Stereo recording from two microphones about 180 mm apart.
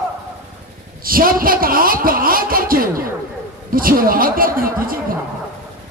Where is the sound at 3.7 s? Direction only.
50° right (ahead or behind).